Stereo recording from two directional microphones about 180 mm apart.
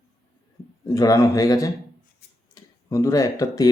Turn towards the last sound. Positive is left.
turn(degrees=20)  # may be behind; listen again after turning